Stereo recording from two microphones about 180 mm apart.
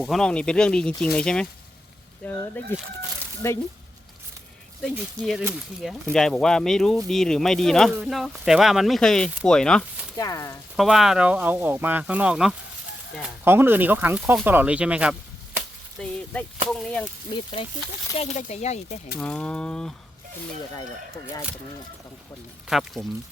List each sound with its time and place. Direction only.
0.0 s speech: centre (ahead or behind)
4.9 s speech: centre (ahead or behind)
10.2 s speech: 20° left (ahead or behind)
10.8 s speech: centre (ahead or behind)
16.0 s speech: 10° left (ahead or behind)
17.3 s speech: 30° left (ahead or behind)
18.2 s speech: 40° left (ahead or behind)
19.2 s speech: 5° left (ahead or behind)
22.6 s speech: centre (ahead or behind)